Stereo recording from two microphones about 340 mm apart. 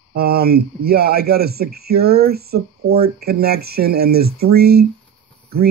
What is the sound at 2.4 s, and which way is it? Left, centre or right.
Speech, right.